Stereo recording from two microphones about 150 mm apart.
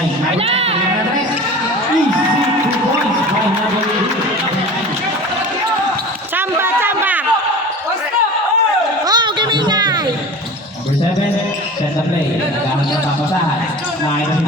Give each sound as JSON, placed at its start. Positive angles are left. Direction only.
{"t": 0.3, "sound": "speech", "side_deg": -40}
{"t": 6.3, "sound": "a sound", "side_deg": -15}
{"t": 9.0, "sound": "music", "side_deg": -30}